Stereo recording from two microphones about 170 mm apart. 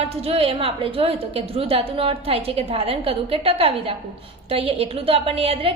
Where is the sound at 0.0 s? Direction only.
35° right (ahead or behind).